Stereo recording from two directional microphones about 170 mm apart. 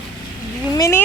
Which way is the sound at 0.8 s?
15° left (ahead or behind).